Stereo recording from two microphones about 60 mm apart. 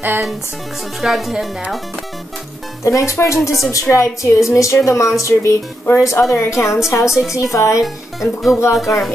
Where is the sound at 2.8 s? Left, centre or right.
Left.